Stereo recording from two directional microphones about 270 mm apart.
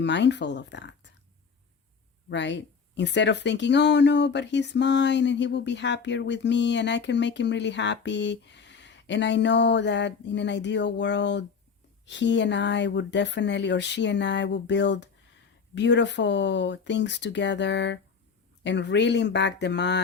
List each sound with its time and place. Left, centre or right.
0.0 s speech: left
2.3 s speech: left